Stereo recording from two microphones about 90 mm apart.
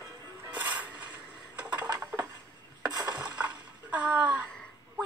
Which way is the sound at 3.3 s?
15° right (ahead or behind).